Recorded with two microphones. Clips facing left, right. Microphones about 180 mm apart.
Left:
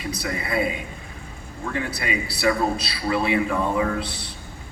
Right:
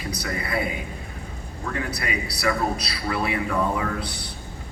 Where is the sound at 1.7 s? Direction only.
25° left (ahead or behind).